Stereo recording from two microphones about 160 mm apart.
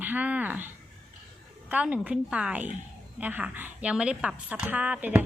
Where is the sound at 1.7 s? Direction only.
10° right (ahead or behind).